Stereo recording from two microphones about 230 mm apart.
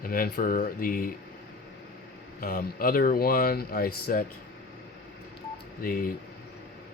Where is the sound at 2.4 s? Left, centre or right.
Left.